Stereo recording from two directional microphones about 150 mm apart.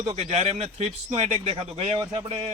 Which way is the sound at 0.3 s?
45° right (ahead or behind).